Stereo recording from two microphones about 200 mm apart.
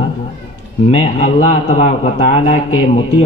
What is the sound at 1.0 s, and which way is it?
A man's voice, 30° left (ahead or behind).